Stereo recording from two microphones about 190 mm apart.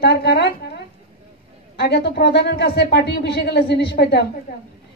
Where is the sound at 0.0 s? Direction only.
60° left (ahead or behind).